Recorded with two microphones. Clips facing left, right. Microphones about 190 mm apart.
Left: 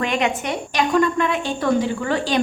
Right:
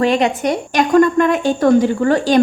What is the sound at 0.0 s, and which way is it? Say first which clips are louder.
Speech: right 7 dB; 35° right (ahead or behind).